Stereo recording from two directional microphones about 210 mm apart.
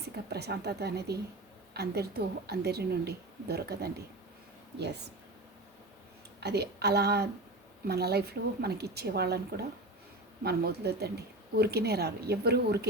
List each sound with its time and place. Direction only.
0.3 s a woman's voice: 50° right (ahead or behind)
6.4 s a woman's voice: 50° right (ahead or behind)